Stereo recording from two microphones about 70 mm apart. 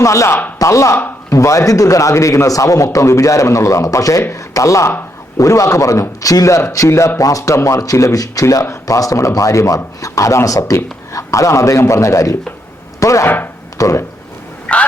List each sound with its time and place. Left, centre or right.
0.0 s a man's voice: left
13.0 s chopping: left
13.2 s chopping: left
13.7 s speech: left
14.7 s speech: centre